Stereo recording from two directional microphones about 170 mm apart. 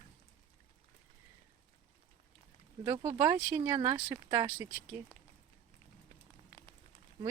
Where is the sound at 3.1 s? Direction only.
20° right (ahead or behind).